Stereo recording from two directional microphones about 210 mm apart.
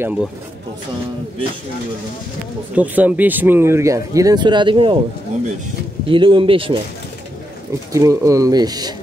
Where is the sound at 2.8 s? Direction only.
5° right (ahead or behind); by 4.9 s 25° right (ahead or behind).